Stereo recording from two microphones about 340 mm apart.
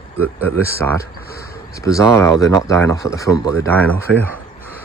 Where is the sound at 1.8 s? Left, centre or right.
Centre.